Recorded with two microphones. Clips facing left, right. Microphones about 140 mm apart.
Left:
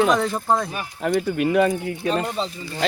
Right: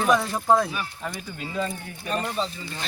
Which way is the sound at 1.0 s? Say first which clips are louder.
Left 13 dB; 75° left (ahead or behind).